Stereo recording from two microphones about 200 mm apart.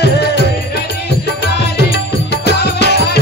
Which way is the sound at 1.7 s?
55° left (ahead or behind).